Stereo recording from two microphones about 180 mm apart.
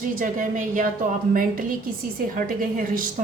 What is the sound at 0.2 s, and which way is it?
A woman's voice, 50° right (ahead or behind).